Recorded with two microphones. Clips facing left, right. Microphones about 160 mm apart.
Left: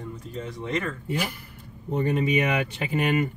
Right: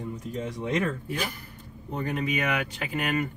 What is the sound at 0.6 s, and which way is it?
Speech, 10° right (ahead or behind).